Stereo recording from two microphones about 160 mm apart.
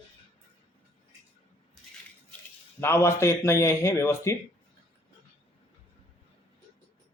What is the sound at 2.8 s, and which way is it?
Speech, 15° left (ahead or behind).